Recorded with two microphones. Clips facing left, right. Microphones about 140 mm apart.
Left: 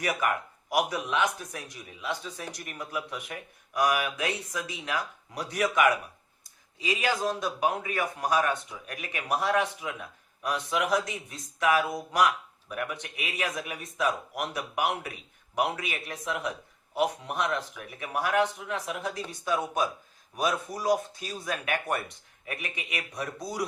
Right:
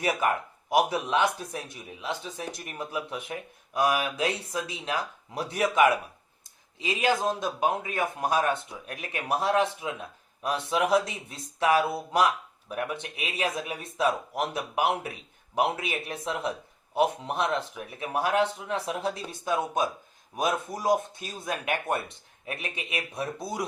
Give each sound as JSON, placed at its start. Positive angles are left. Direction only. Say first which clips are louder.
{"t": 0.0, "sound": "a man's voice", "louder": "right 2 dB", "side_deg": -25}